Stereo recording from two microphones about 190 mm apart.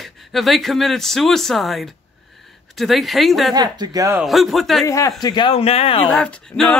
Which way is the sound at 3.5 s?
20° right (ahead or behind).